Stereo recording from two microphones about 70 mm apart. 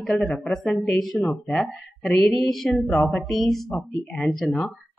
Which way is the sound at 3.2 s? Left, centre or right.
Centre.